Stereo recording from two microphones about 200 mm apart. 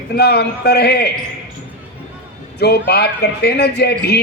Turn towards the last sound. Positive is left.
turn(degrees=55)  # may be behind; listen again after turning